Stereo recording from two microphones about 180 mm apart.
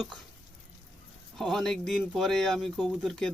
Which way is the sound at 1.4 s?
Centre (ahead or behind).